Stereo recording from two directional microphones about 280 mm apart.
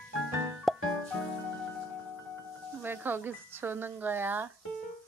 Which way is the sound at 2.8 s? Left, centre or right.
Centre.